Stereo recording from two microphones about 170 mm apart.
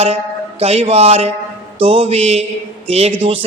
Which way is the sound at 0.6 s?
35° right (ahead or behind).